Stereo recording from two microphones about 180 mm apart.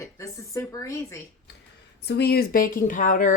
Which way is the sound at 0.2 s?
15° left (ahead or behind).